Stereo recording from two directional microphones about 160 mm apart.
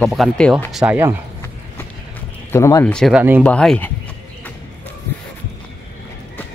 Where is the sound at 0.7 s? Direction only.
10° right (ahead or behind).